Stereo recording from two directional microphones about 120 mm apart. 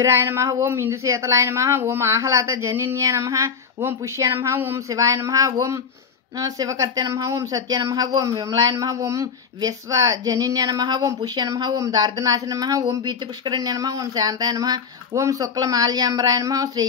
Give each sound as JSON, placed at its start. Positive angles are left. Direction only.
{"t": 0.0, "sound": "a woman's voice", "side_deg": -25}